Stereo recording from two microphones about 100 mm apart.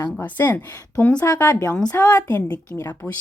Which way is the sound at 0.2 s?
20° left (ahead or behind).